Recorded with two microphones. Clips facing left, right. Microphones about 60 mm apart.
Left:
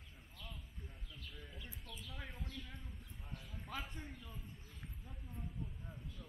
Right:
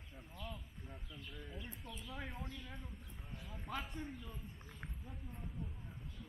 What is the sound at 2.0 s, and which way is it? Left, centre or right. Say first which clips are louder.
Speech: right 4 dB; centre.